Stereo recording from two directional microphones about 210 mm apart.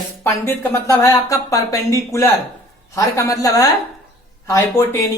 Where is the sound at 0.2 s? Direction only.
10° left (ahead or behind).